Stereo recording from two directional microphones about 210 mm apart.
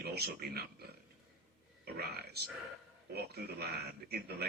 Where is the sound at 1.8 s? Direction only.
50° right (ahead or behind).